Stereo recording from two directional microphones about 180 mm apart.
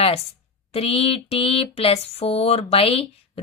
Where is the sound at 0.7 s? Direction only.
35° left (ahead or behind).